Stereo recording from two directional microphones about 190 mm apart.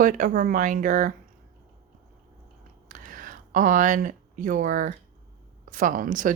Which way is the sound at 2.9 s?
45° right (ahead or behind).